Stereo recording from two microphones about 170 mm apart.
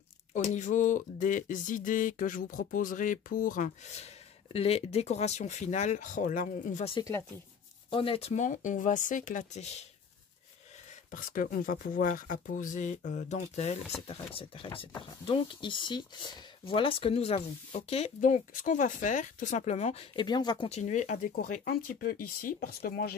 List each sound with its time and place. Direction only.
0.3 s speech: 45° left (ahead or behind)
7.0 s speech: 20° left (ahead or behind)
7.9 s speech: 35° left (ahead or behind)
11.1 s speech: 55° left (ahead or behind); by 20.2 s 40° left (ahead or behind)
20.2 s speech: 25° left (ahead or behind); by 23.1 s 65° left (ahead or behind)